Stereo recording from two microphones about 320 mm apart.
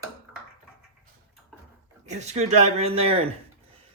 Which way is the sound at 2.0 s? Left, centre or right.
Right.